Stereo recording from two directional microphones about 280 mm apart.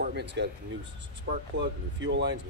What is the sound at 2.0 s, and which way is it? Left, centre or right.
Speech, right.